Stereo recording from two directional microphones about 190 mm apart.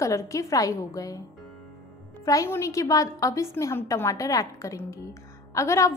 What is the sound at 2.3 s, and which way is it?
A woman's voice, 15° left (ahead or behind).